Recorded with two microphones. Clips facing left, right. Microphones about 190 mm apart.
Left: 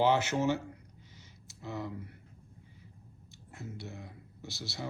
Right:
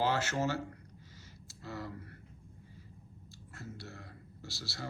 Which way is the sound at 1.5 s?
20° left (ahead or behind).